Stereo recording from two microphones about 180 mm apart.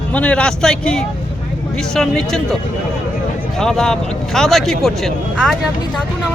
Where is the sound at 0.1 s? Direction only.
5° left (ahead or behind).